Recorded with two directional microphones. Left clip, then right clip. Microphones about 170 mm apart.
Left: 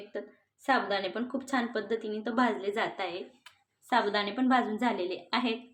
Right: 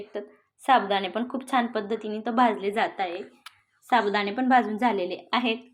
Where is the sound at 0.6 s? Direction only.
15° right (ahead or behind).